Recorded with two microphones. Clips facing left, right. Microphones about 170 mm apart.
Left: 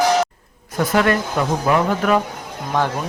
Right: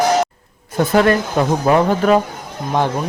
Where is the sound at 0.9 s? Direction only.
30° right (ahead or behind).